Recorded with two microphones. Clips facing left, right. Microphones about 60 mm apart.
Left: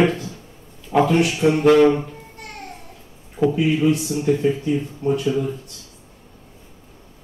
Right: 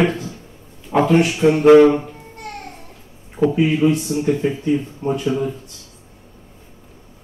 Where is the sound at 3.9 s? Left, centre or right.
Centre.